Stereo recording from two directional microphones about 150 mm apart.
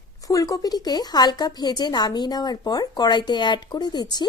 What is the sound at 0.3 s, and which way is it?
A woman's voice, 20° left (ahead or behind).